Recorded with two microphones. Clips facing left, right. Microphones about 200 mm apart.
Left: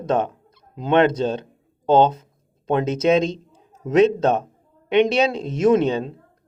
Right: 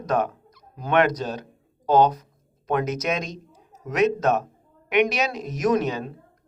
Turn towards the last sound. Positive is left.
turn(degrees=25)  # may be behind; listen again after turning